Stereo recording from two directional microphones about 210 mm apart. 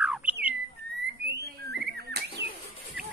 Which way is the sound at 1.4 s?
50° right (ahead or behind).